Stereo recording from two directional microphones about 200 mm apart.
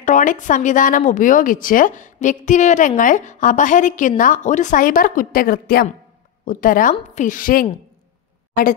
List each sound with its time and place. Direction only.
0.0 s a woman's voice: 40° left (ahead or behind)